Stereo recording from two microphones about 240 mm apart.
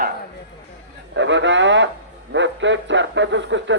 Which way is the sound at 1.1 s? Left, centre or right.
Right.